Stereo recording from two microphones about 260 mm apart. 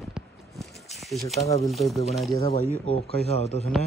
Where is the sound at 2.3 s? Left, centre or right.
Left.